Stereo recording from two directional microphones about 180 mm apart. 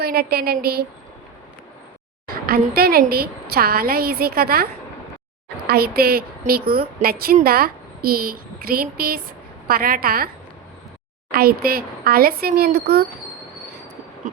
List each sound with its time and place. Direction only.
0.0 s a woman's voice: 60° right (ahead or behind)
2.2 s a woman's voice: 55° right (ahead or behind)
11.3 s a woman's voice: 60° right (ahead or behind)